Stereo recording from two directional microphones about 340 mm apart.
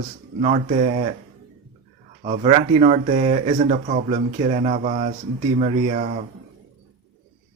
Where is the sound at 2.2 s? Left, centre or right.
Centre.